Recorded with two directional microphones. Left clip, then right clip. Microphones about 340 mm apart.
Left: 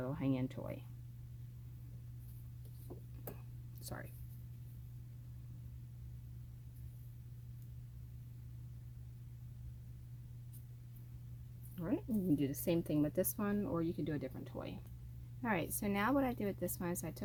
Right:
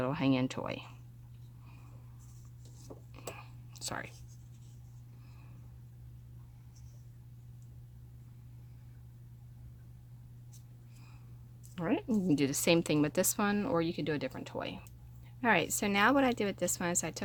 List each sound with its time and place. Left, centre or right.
0.0 s a woman's voice: right
3.8 s whispering: centre
11.7 s a woman's voice: right